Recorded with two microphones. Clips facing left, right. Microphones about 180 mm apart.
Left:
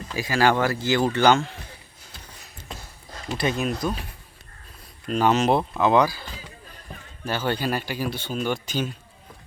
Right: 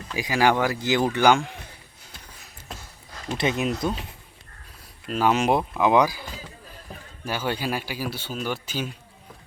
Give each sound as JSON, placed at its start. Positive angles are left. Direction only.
{"t": 0.2, "sound": "speech", "side_deg": -15}
{"t": 3.3, "sound": "speech", "side_deg": -20}
{"t": 5.0, "sound": "speech", "side_deg": -5}